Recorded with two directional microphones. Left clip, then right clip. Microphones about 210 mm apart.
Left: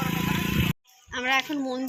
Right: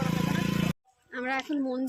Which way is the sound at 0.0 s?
50° right (ahead or behind).